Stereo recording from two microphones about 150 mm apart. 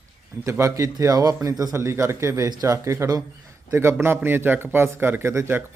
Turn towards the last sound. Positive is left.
turn(degrees=-15)  # may be behind; listen again after turning